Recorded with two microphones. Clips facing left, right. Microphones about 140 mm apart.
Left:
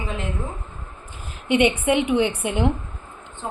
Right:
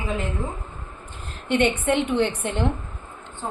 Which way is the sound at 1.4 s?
10° left (ahead or behind).